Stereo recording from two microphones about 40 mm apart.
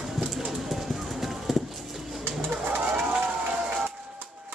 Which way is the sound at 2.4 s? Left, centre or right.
Right.